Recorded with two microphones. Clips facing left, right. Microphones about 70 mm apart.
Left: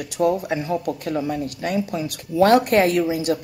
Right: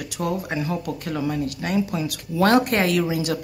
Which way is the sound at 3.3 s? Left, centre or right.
Right.